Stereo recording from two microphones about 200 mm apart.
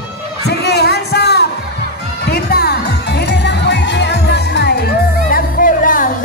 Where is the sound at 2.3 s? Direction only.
50° left (ahead or behind).